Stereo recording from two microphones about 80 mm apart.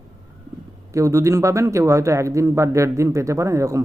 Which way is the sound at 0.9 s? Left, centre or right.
Right.